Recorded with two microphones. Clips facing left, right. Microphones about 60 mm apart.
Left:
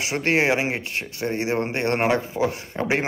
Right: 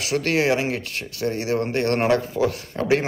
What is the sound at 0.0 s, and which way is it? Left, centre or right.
A man's voice, left.